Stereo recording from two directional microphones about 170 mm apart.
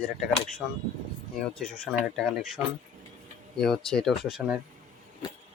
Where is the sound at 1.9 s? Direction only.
Centre (ahead or behind).